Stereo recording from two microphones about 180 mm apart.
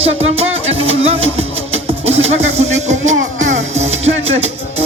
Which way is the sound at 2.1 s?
35° right (ahead or behind).